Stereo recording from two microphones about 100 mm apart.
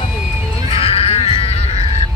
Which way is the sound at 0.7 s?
75° left (ahead or behind).